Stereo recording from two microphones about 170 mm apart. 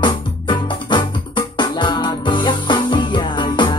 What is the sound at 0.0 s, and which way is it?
Music, 25° left (ahead or behind).